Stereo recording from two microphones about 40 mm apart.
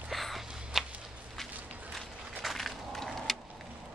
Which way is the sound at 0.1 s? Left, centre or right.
Centre.